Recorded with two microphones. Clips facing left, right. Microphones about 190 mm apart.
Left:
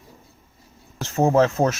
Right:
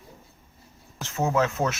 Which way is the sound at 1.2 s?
35° left (ahead or behind).